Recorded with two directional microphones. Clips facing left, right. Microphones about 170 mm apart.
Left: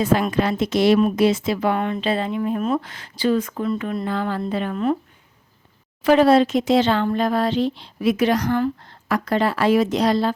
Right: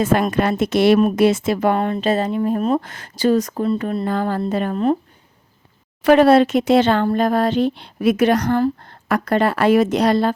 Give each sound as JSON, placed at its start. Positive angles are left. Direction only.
{"t": 0.0, "sound": "speech", "side_deg": -50}
{"t": 6.1, "sound": "speech", "side_deg": -60}